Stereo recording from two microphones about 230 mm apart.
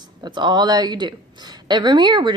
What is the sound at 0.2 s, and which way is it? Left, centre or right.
A woman's voice, centre.